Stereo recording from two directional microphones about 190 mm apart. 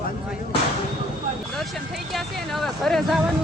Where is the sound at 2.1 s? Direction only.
Centre (ahead or behind).